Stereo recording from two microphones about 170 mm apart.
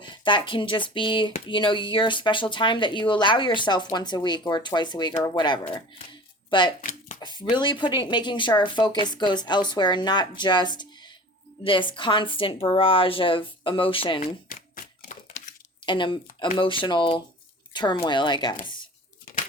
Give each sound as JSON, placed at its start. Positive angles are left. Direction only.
{"t": 0.0, "sound": "a woman's voice", "side_deg": 30}
{"t": 14.5, "sound": "a sound", "side_deg": 55}
{"t": 15.9, "sound": "speech", "side_deg": 30}